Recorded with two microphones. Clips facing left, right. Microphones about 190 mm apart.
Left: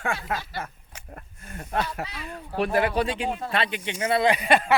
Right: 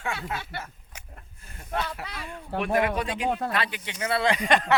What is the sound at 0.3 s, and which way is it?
Speech, 55° left (ahead or behind).